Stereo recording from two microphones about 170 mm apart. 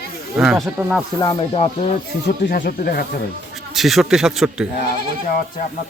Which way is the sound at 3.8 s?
Centre (ahead or behind).